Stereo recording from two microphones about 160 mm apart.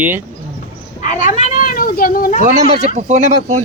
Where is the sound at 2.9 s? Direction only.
45° right (ahead or behind).